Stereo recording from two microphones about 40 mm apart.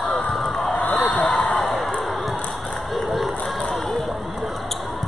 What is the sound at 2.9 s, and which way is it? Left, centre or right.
Crowd, centre.